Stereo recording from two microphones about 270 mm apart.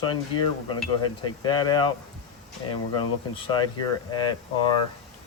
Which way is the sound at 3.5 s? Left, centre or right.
Centre.